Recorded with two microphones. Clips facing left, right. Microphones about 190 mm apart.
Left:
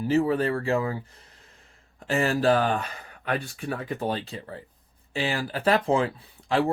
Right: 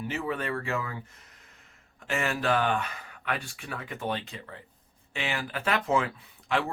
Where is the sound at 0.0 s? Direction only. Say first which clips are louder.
Left 9 dB; 35° left (ahead or behind).